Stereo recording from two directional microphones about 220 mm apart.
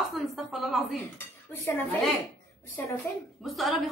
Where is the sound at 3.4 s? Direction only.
Centre (ahead or behind).